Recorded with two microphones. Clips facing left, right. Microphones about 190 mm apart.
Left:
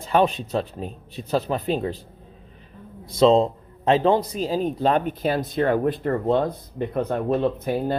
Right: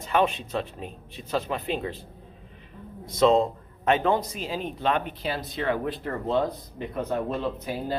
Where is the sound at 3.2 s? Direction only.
30° left (ahead or behind).